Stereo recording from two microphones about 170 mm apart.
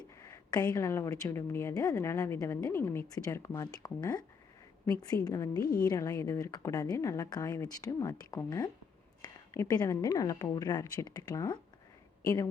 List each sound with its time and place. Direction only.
0.2 s a woman's voice: 20° left (ahead or behind)